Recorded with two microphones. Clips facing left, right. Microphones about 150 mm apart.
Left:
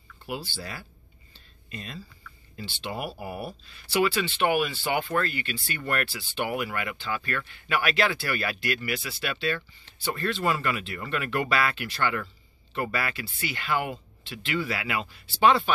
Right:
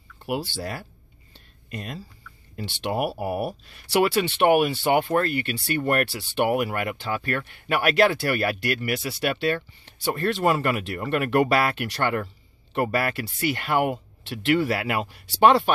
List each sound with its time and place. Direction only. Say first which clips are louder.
0.6 s speech: right 7 dB; 50° right (ahead or behind)
2.6 s speech: right 8 dB; 70° right (ahead or behind)